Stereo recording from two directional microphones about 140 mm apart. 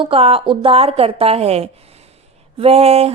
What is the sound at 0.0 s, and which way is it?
A woman's voice, 40° right (ahead or behind).